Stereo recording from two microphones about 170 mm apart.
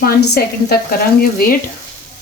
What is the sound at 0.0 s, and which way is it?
Speech, 65° left (ahead or behind).